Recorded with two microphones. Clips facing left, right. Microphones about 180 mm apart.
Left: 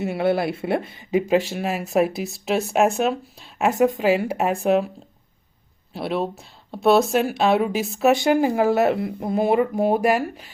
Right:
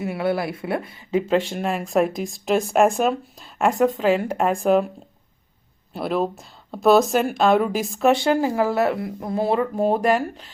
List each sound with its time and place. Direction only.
0.0 s speech: 25° left (ahead or behind)
1.1 s speech: 10° left (ahead or behind)
5.9 s speech: centre (ahead or behind)